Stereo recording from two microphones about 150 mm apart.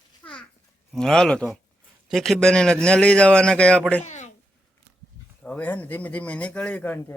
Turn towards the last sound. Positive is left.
turn(degrees=15)  # may be behind; listen again after turning